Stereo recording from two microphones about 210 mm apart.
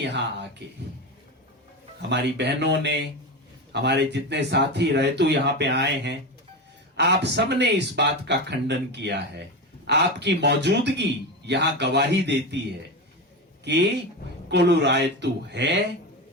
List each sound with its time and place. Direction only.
0.0 s speech: 55° right (ahead or behind)
2.0 s speech: 55° right (ahead or behind)
13.7 s speech: 55° right (ahead or behind)